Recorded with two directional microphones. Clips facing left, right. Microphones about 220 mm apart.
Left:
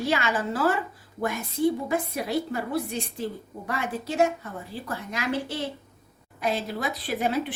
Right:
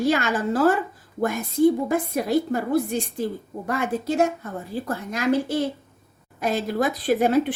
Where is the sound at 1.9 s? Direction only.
45° right (ahead or behind).